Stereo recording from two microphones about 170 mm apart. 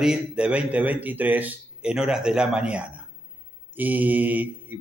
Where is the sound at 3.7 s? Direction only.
10° right (ahead or behind).